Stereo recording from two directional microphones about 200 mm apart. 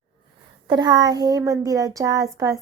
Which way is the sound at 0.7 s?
20° right (ahead or behind).